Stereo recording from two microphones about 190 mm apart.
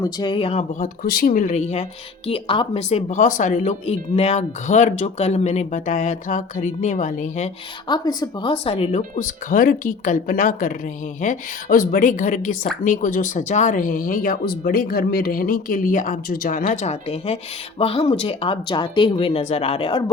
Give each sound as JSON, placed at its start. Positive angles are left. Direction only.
{"t": 0.0, "sound": "speech", "side_deg": 25}
{"t": 1.0, "sound": "speech", "side_deg": 55}
{"t": 7.9, "sound": "speech", "side_deg": 20}